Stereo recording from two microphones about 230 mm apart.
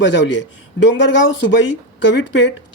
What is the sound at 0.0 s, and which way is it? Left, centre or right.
Speech, left.